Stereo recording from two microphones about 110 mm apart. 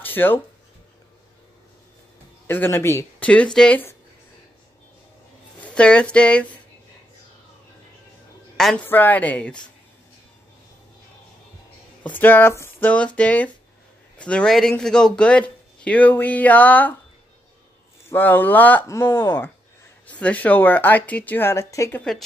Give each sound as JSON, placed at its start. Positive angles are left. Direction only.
{"t": 0.0, "sound": "a sound", "side_deg": 20}
{"t": 2.4, "sound": "speech", "side_deg": 20}
{"t": 3.2, "sound": "speech", "side_deg": 10}
{"t": 5.6, "sound": "speech", "side_deg": 10}
{"t": 8.5, "sound": "speech", "side_deg": 5}
{"t": 8.8, "sound": "speech", "side_deg": 15}
{"t": 12.0, "sound": "speech", "side_deg": 15}
{"t": 18.1, "sound": "speech", "side_deg": 15}